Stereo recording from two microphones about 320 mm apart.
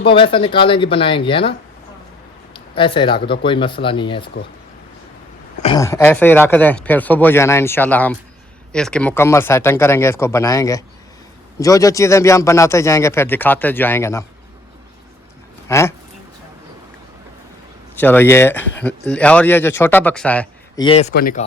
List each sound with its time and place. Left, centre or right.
0.0 s speech: centre
5.6 s speech: centre
15.7 s speech: centre
17.9 s speech: centre
20.8 s speech: centre